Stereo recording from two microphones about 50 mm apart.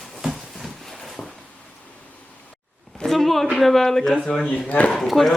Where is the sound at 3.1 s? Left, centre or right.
Centre.